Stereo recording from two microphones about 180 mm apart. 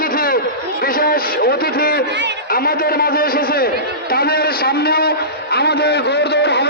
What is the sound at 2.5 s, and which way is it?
A man's voice, 55° left (ahead or behind).